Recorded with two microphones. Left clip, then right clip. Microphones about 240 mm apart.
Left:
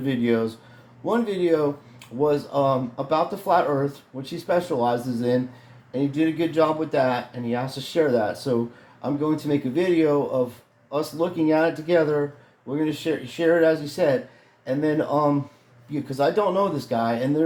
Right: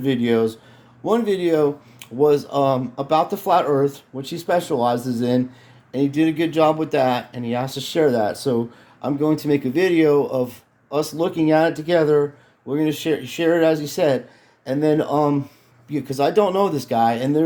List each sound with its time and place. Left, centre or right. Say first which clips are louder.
0.0 s speech: right 4 dB; right